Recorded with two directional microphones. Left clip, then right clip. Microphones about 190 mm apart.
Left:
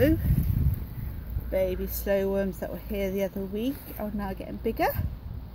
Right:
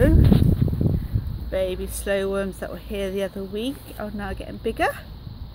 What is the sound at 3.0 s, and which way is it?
Speech, 55° right (ahead or behind).